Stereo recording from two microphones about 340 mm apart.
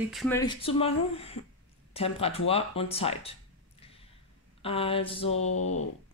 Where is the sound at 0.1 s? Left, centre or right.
Centre.